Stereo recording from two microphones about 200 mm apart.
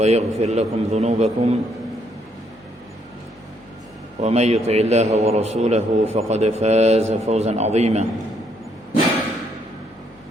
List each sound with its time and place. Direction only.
0.0 s a man's voice: 35° right (ahead or behind)
4.2 s a man's voice: 35° right (ahead or behind)